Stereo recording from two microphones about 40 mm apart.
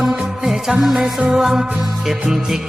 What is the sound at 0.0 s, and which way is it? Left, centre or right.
Music, centre.